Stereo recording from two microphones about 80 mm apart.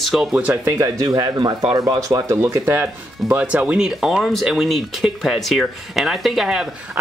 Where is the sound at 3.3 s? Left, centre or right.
Centre.